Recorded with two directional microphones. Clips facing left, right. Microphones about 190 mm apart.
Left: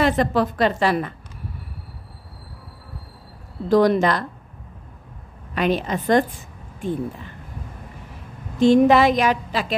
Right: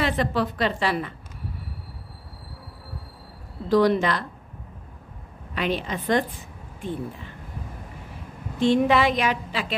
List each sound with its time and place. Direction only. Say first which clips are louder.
0.0 s a woman's voice: left 5 dB; 45° left (ahead or behind)
3.6 s a woman's voice: left 3 dB; 45° left (ahead or behind)
5.5 s a woman's voice: left 5 dB; 45° left (ahead or behind)
8.5 s a woman's voice: left 5 dB; 40° left (ahead or behind)